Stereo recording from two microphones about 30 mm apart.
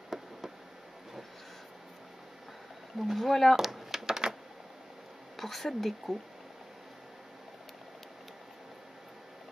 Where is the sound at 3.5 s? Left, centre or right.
Centre.